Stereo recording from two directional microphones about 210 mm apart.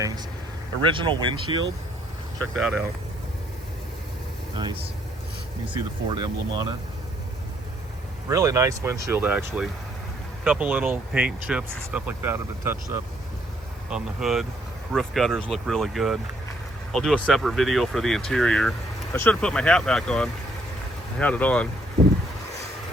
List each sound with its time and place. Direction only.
0.8 s speech: 25° right (ahead or behind)
2.4 s speech: centre (ahead or behind)
6.1 s speech: 20° right (ahead or behind)
8.3 s speech: 15° right (ahead or behind); by 21.7 s 5° left (ahead or behind)